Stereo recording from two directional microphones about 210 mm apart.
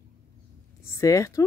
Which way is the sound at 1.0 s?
15° left (ahead or behind).